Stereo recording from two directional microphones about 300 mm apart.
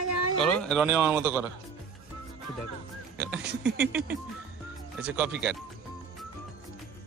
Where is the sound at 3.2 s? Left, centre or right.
Centre.